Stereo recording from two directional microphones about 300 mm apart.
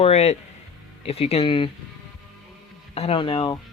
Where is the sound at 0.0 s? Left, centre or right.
Left.